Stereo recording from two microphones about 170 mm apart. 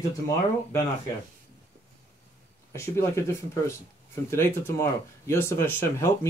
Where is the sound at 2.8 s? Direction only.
15° left (ahead or behind).